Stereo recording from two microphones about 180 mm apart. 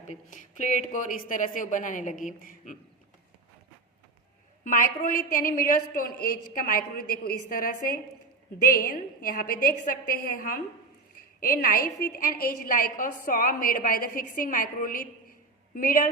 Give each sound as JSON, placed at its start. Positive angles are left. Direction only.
{"t": 0.1, "sound": "a woman's voice", "side_deg": 45}
{"t": 4.6, "sound": "a woman's voice", "side_deg": 50}